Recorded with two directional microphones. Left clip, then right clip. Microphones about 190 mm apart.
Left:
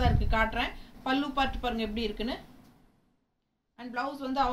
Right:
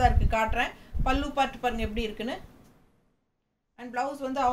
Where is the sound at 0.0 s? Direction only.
15° right (ahead or behind).